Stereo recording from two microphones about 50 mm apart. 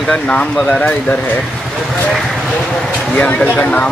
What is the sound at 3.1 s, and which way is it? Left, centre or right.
Speech, left.